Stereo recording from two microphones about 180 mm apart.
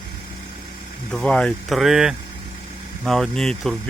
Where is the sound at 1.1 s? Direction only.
5° left (ahead or behind).